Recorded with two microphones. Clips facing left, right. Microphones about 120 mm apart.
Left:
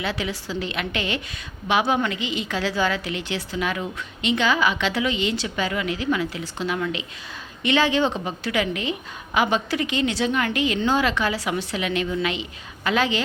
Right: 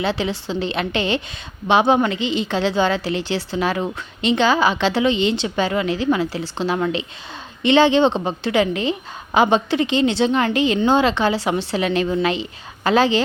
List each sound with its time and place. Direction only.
0.0 s a woman's voice: 30° right (ahead or behind)